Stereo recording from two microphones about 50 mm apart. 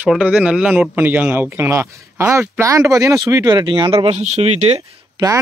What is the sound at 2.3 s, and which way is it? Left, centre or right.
Speech, right.